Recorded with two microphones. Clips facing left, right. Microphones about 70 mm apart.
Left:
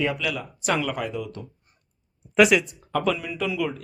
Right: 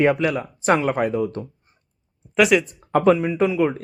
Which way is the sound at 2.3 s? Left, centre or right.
Centre.